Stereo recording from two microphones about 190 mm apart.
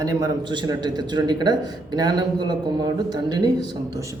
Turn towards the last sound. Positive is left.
turn(degrees=-20)  # may be behind; listen again after turning